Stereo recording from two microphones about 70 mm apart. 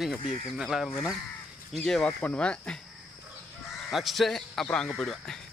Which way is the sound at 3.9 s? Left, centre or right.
Centre.